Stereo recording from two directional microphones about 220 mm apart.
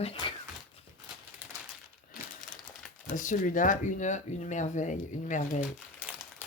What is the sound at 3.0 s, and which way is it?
Speech, 35° left (ahead or behind).